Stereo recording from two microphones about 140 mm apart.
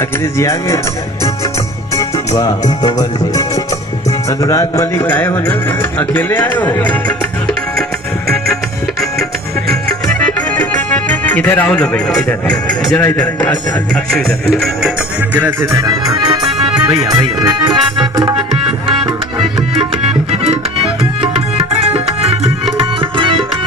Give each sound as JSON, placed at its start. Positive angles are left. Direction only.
{"t": 0.3, "sound": "speech", "side_deg": 20}
{"t": 2.0, "sound": "music", "side_deg": 25}
{"t": 4.3, "sound": "speech", "side_deg": 20}
{"t": 10.2, "sound": "music", "side_deg": 10}
{"t": 13.0, "sound": "speech", "side_deg": 10}
{"t": 13.9, "sound": "music", "side_deg": 5}
{"t": 16.9, "sound": "speech", "side_deg": -25}
{"t": 19.8, "sound": "music", "side_deg": -45}
{"t": 21.0, "sound": "tabla", "side_deg": -45}